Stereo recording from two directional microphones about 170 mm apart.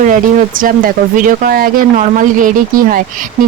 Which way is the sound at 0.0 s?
50° right (ahead or behind).